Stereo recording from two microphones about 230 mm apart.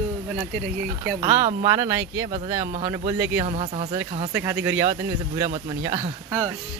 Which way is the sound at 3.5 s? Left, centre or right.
Right.